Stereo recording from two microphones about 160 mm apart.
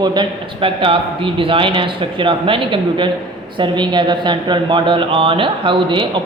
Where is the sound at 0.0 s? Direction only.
30° right (ahead or behind).